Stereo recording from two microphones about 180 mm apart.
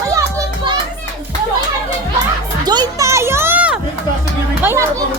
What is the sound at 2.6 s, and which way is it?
Music, 25° right (ahead or behind).